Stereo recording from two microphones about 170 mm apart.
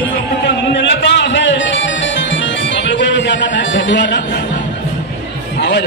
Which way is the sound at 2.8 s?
90° left.